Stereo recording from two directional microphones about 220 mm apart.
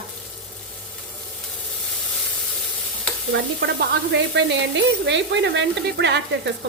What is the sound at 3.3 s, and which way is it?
A woman's voice, 45° right (ahead or behind).